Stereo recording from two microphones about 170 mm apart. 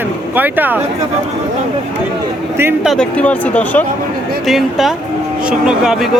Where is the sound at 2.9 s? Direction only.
5° left (ahead or behind).